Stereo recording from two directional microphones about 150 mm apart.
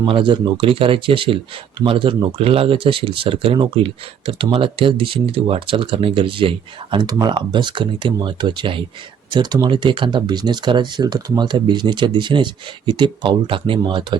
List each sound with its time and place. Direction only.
0.0 s speech: 35° right (ahead or behind)